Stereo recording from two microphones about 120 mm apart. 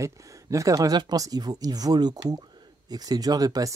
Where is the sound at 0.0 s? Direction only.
25° right (ahead or behind).